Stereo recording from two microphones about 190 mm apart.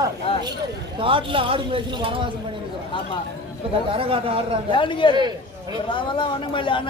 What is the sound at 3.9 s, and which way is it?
Speech, 30° right (ahead or behind).